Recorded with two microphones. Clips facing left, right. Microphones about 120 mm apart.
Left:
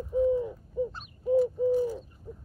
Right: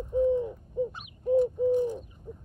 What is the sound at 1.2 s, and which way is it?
Bird, 5° left (ahead or behind).